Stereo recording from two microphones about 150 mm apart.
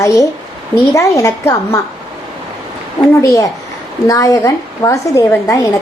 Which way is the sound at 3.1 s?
20° left (ahead or behind).